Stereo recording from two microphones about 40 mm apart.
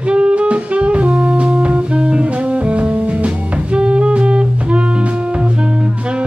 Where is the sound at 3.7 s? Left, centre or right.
Right.